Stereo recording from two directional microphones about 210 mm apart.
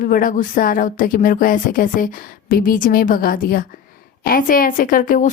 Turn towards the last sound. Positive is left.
turn(degrees=40)  # may be behind; listen again after turning